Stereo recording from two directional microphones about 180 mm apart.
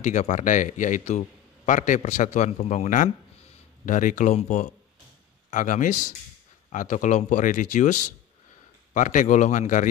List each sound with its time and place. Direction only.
0.0 s a man's voice: 40° left (ahead or behind)